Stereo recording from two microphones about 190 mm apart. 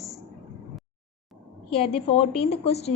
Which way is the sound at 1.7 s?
30° left (ahead or behind).